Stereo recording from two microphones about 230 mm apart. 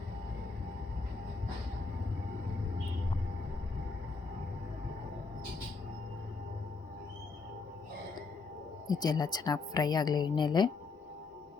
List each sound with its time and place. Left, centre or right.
8.9 s speech: centre